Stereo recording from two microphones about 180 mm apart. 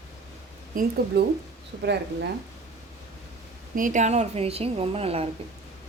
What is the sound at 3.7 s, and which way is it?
A woman's voice, 45° right (ahead or behind).